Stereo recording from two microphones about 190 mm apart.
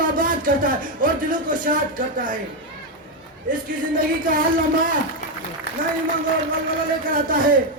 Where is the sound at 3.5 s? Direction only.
45° right (ahead or behind).